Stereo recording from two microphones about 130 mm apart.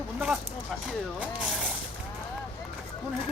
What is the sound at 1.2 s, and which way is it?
Speech, 5° right (ahead or behind).